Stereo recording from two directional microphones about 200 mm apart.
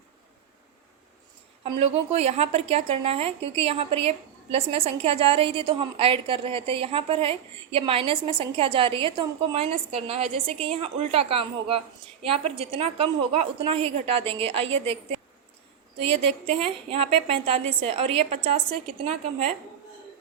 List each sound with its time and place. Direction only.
1.6 s a woman's voice: 30° right (ahead or behind)
16.0 s a woman's voice: 30° right (ahead or behind)